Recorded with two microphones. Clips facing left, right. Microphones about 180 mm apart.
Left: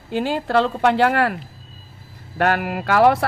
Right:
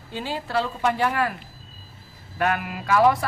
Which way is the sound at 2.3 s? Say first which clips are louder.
Left 5 dB; 70° left (ahead or behind).